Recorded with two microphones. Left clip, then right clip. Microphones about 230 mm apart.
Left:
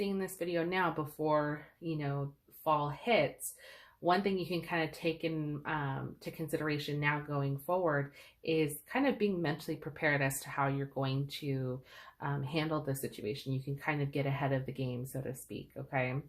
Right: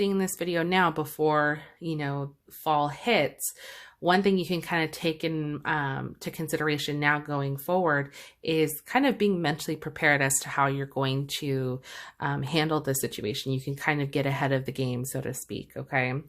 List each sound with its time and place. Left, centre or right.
0.0 s speech: right